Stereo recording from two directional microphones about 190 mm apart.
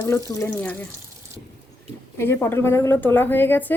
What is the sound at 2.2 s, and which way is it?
A woman's voice, 10° left (ahead or behind).